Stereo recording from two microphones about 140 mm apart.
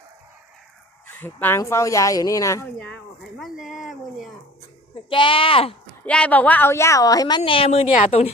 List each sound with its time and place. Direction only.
1.0 s a woman's voice: 15° left (ahead or behind)
2.7 s a sound: 5° left (ahead or behind)
5.0 s speech: 35° left (ahead or behind)
6.1 s a woman's voice: 10° left (ahead or behind); by 8.3 s 45° left (ahead or behind)